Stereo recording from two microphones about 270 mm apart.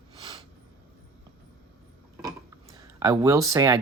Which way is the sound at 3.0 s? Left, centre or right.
Centre.